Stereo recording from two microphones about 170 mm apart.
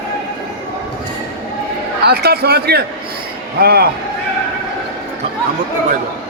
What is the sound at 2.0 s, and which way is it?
A man's voice, 65° right (ahead or behind).